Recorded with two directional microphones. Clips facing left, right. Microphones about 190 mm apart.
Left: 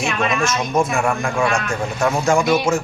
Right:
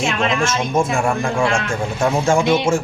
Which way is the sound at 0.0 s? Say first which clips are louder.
Right 1 dB; 25° right (ahead or behind).